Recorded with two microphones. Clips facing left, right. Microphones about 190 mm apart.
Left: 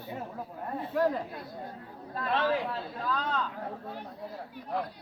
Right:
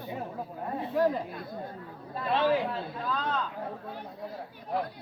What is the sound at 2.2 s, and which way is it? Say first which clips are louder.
Speech: right 2 dB; 10° right (ahead or behind).